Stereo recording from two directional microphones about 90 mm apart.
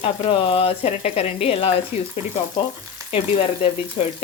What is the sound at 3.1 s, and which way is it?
Frying, 90° left.